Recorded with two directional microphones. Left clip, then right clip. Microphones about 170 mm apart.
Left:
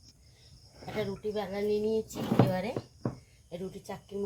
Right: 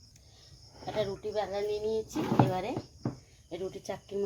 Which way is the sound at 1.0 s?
35° right (ahead or behind).